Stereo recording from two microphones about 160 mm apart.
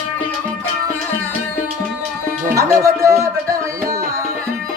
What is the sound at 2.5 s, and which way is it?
Music, 20° right (ahead or behind).